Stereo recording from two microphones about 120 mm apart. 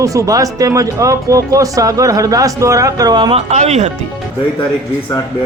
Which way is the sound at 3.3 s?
65° right (ahead or behind).